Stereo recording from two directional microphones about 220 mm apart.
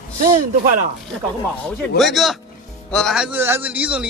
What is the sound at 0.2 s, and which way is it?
Speech, 35° right (ahead or behind).